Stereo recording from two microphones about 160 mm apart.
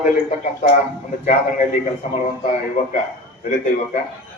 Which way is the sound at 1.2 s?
50° left (ahead or behind).